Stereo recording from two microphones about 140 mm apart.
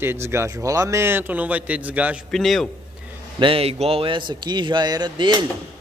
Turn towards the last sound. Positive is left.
turn(degrees=-35)  # may be behind; listen again after turning